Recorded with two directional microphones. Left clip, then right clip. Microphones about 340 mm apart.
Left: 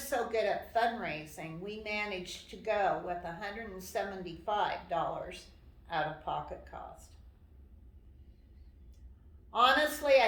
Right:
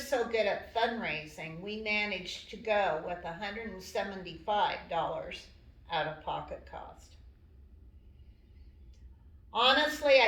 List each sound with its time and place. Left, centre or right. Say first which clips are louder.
0.1 s a woman's voice: right 2 dB; centre
9.5 s a woman's voice: even; centre